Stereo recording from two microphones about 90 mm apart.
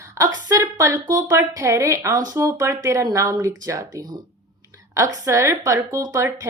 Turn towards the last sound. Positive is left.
turn(degrees=-40)  # may be behind; listen again after turning